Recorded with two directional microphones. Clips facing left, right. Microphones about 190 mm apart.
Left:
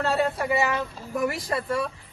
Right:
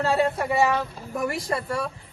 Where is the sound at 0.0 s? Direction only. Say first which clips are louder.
Right 2 dB; centre (ahead or behind).